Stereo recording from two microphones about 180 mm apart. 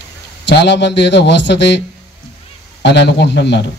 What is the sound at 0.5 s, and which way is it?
A man's voice, 75° left (ahead or behind).